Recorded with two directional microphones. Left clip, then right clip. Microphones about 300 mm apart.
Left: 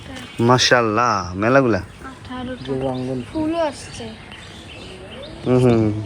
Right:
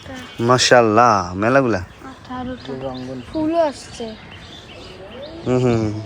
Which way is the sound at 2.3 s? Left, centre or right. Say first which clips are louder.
Right 2 dB; right.